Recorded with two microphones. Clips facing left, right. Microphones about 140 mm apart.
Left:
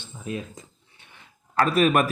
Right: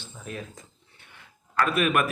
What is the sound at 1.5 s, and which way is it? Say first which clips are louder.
Speech: left 4 dB; 35° left (ahead or behind).